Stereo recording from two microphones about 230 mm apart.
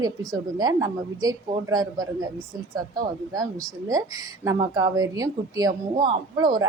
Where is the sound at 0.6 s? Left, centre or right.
Centre.